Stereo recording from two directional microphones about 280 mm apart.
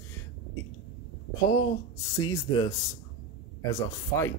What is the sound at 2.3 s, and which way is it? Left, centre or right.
Speech, centre.